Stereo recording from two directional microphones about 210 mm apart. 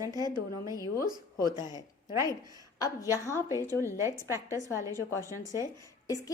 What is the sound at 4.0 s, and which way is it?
A woman's voice, 15° right (ahead or behind).